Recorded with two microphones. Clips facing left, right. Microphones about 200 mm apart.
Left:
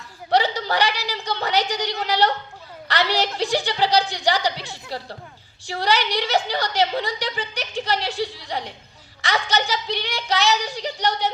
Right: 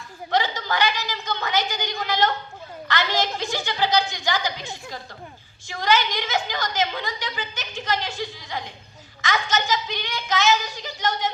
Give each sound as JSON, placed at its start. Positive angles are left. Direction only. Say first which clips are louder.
{"t": 0.3, "sound": "chuckle", "louder": "left 4 dB", "side_deg": 35}
{"t": 2.0, "sound": "a woman's voice", "louder": "left 2 dB", "side_deg": 35}
{"t": 5.6, "sound": "a woman's voice", "louder": "even", "side_deg": 35}